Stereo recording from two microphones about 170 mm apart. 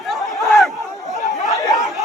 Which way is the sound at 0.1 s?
Centre (ahead or behind).